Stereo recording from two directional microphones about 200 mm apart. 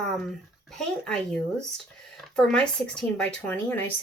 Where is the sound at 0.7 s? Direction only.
5° left (ahead or behind).